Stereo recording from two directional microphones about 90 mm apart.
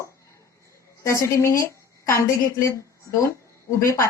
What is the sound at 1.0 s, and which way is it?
Speech, 35° left (ahead or behind).